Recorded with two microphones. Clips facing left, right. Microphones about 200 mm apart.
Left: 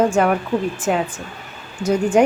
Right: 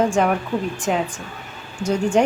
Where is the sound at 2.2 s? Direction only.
10° left (ahead or behind).